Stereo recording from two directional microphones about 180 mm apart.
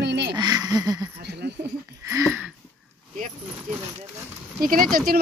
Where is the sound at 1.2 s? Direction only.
70° right (ahead or behind).